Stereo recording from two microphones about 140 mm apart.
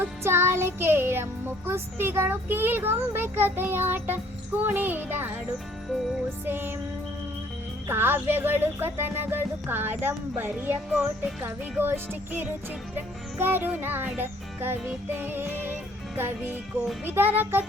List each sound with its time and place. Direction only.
0.0 s music: 15° right (ahead or behind)
6.4 s music: 15° right (ahead or behind)
7.9 s music: 15° right (ahead or behind)